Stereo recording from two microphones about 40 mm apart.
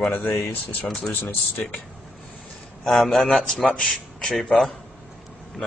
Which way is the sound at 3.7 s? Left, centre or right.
Left.